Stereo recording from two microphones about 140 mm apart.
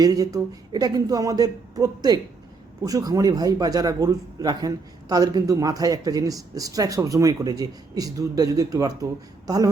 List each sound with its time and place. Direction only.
0.0 s a man's voice: 25° right (ahead or behind)